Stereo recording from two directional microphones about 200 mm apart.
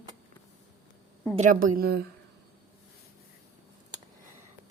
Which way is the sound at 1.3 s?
40° right (ahead or behind).